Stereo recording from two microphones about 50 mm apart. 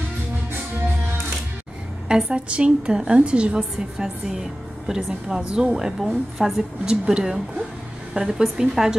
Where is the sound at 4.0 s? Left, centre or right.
Centre.